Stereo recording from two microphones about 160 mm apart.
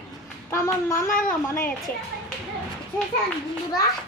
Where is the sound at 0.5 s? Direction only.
20° left (ahead or behind).